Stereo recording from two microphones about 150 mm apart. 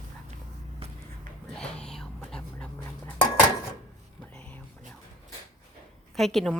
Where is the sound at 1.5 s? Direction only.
5° left (ahead or behind).